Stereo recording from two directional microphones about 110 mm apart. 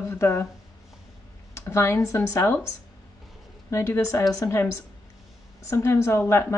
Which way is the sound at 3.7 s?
25° left (ahead or behind).